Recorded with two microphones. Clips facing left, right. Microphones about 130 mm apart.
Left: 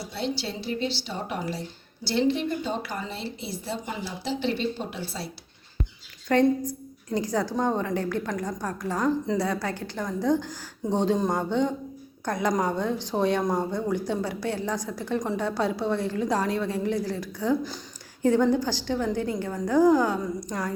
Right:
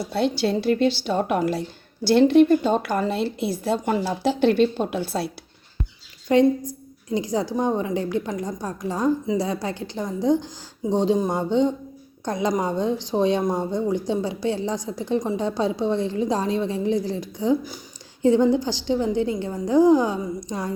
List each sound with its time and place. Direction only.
0.1 s a woman's voice: 55° right (ahead or behind)
6.2 s a woman's voice: 15° right (ahead or behind)